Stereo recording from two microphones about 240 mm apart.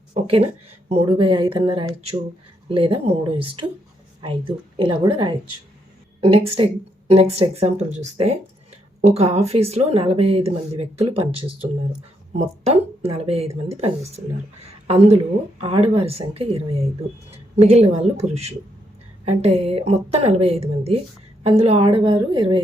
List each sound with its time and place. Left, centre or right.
0.1 s a sound: right
0.9 s speech: right
14.8 s speech: right